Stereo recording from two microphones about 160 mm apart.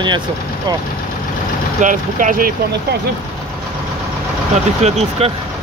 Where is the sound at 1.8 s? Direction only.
55° right (ahead or behind).